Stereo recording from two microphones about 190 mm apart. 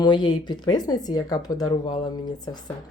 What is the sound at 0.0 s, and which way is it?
Speech, 20° left (ahead or behind).